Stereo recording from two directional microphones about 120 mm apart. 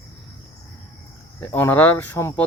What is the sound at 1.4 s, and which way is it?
A woman's voice, 15° left (ahead or behind).